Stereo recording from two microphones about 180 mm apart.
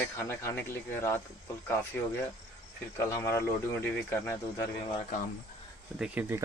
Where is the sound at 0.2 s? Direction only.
15° left (ahead or behind).